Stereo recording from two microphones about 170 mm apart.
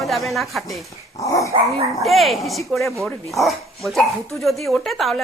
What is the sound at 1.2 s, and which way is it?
Dog, 20° left (ahead or behind).